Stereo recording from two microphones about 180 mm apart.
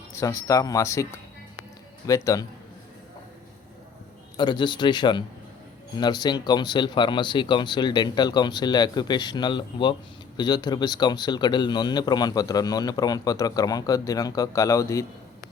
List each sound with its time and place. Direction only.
0.1 s speech: 15° left (ahead or behind)
2.0 s speech: 20° left (ahead or behind)
4.4 s speech: 25° left (ahead or behind)